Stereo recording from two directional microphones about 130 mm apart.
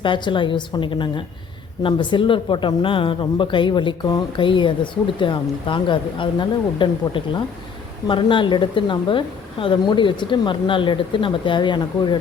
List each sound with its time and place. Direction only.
0.0 s speech: 40° left (ahead or behind)